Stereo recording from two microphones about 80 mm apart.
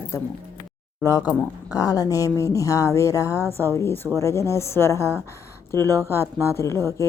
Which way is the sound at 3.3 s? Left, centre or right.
Right.